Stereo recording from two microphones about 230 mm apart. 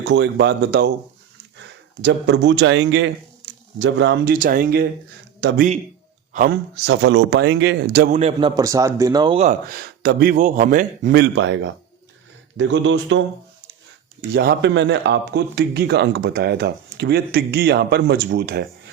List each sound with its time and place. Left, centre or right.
0.0 s a man's voice: right
4.4 s a man's voice: right
6.3 s a man's voice: right
6.8 s a man's voice: right
8.1 s a man's voice: right
14.3 s a man's voice: right